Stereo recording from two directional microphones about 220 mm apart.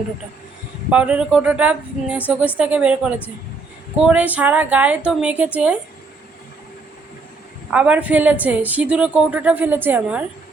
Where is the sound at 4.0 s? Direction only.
5° right (ahead or behind).